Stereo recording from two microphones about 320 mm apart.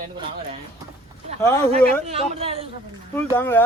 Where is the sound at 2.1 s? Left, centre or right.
Centre.